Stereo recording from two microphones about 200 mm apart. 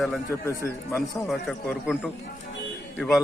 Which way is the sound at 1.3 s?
Centre (ahead or behind).